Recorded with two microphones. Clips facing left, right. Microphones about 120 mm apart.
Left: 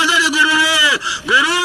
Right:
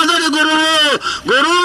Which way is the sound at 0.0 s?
20° right (ahead or behind).